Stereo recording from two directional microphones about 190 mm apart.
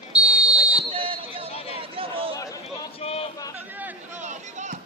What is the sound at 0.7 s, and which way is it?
Chatter, 30° right (ahead or behind).